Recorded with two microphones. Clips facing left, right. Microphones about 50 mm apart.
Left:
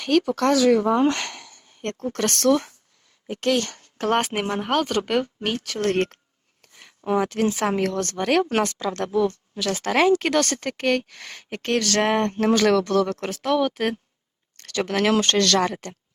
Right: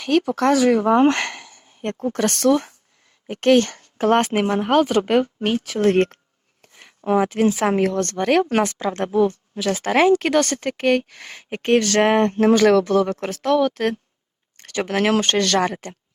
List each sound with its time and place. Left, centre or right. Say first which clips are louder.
0.5 s speech: even; right
0.8 s speech: right 4 dB; right
1.5 s a sound: right 3 dB; centre
2.1 s speech: right 2 dB; centre
3.2 s speech: right 7 dB; right
3.9 s speech: right 5 dB; centre
6.6 s a sound: right 3 dB; centre
7.9 s speech: right 3 dB; centre; by 12.3 s right
12.3 s speech: right 4 dB; centre
13.2 s speech: right 3 dB; centre
14.5 s speech: right 2 dB; centre